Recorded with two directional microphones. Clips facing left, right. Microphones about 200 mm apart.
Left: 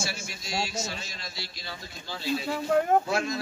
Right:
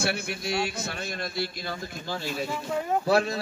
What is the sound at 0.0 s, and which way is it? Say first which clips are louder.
A man's voice: right 7 dB; 60° right (ahead or behind).